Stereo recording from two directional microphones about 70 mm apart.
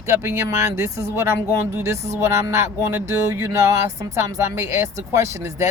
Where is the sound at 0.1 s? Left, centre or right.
Right.